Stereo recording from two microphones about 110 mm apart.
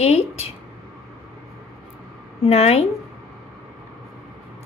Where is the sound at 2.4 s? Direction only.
70° left (ahead or behind).